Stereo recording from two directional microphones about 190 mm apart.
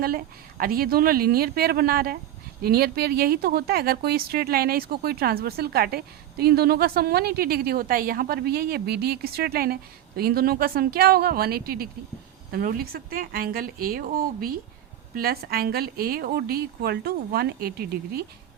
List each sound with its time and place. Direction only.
0.6 s speech: 50° right (ahead or behind)
15.1 s speech: 55° right (ahead or behind)